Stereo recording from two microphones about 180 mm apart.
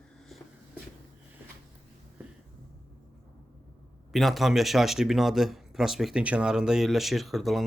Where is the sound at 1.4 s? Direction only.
10° right (ahead or behind).